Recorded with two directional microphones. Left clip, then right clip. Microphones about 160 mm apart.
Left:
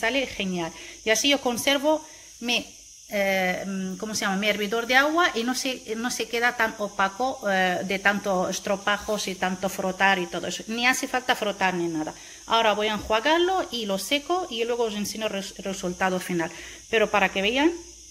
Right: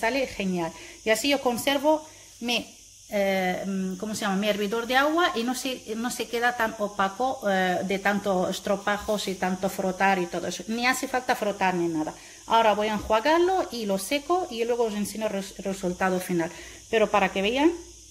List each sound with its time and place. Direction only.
0.0 s speech: centre (ahead or behind)
3.1 s speech: centre (ahead or behind)